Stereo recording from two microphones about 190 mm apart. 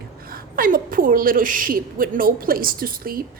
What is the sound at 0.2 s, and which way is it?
Speech, 50° right (ahead or behind).